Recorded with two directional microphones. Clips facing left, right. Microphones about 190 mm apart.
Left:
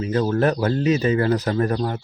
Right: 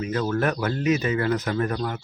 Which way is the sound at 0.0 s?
30° left (ahead or behind).